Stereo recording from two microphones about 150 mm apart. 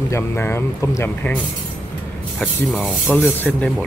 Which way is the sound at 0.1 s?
15° left (ahead or behind).